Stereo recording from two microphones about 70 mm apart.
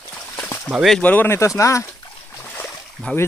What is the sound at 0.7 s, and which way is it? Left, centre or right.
Speech, centre.